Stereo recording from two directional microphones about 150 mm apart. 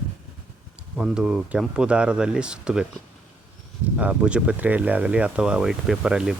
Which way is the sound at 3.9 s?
10° right (ahead or behind).